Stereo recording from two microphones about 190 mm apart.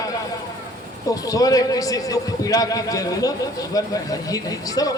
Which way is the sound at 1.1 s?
20° left (ahead or behind).